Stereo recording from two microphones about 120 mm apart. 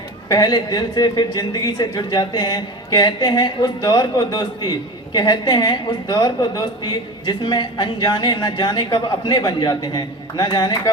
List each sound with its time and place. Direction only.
0.3 s speech: 35° left (ahead or behind)